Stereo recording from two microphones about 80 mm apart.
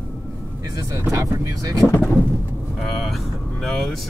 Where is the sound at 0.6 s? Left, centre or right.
Right.